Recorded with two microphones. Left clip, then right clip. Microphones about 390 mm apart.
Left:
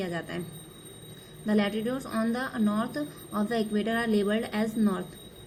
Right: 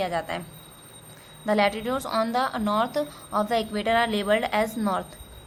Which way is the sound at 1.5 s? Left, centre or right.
Right.